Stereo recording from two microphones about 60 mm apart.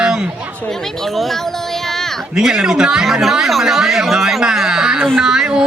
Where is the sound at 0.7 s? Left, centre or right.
Centre.